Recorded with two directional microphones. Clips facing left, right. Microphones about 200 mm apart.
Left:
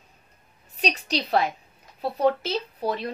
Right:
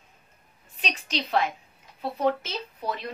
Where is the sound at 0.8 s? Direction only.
40° left (ahead or behind).